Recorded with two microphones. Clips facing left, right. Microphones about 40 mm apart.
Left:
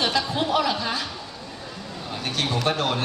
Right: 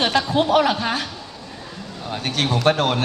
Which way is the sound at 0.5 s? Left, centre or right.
Right.